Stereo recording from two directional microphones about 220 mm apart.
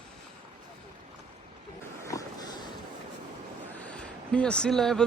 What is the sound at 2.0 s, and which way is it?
Boat, 15° left (ahead or behind).